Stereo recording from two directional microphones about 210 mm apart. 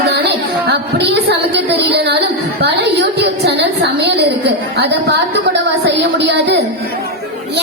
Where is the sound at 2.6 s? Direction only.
55° right (ahead or behind).